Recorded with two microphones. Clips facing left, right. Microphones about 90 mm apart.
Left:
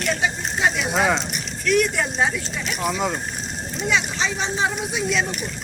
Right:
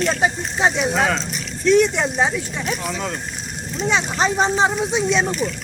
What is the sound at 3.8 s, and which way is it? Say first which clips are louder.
Speech: right 4 dB; 30° right (ahead or behind).